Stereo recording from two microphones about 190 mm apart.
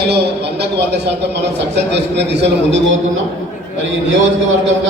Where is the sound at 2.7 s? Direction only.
85° right.